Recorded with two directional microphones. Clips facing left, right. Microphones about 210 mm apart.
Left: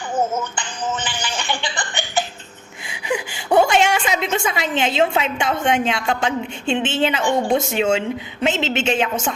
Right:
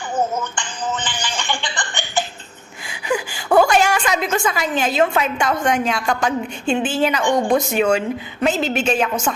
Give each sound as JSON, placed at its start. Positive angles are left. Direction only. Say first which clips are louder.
{"t": 1.0, "sound": "music", "louder": "even", "side_deg": 10}
{"t": 2.8, "sound": "a woman's voice", "louder": "right 2 dB", "side_deg": 20}